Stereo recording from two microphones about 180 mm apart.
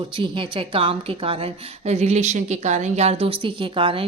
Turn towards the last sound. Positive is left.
turn(degrees=-30)  # may be behind; listen again after turning